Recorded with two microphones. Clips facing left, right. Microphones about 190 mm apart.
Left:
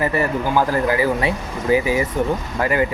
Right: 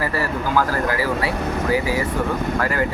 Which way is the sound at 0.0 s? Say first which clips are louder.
Left 3 dB; 20° left (ahead or behind).